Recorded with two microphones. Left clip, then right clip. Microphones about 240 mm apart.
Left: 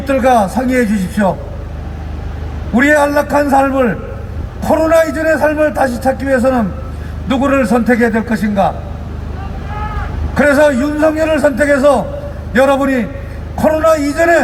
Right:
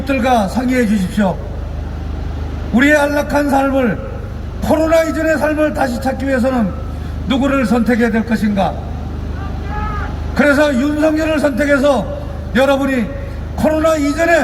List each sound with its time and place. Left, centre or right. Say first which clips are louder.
0.0 s a man's voice: left 4 dB; centre
2.7 s a man's voice: left 2 dB; centre
10.3 s a man's voice: left 3 dB; centre